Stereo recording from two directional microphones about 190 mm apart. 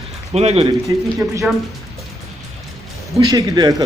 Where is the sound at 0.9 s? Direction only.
20° right (ahead or behind).